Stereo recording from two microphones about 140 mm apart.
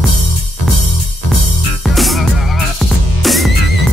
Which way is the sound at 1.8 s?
Centre (ahead or behind).